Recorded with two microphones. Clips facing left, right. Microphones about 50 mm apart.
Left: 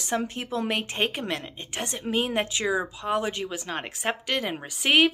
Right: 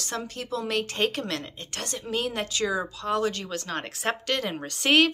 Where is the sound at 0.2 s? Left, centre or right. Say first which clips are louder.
Left 2 dB; left.